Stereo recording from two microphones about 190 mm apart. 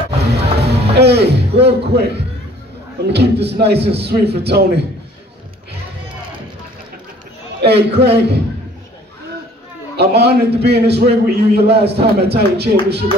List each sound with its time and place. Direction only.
0.4 s music: 60° right (ahead or behind)
3.1 s a man's voice: 60° right (ahead or behind)
7.6 s a man's voice: 60° right (ahead or behind)
9.9 s a man's voice: 60° right (ahead or behind)